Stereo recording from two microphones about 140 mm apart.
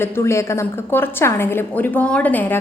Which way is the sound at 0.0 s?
20° left (ahead or behind).